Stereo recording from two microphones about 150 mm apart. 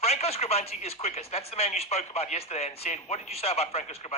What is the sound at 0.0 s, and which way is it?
Speech, 45° left (ahead or behind).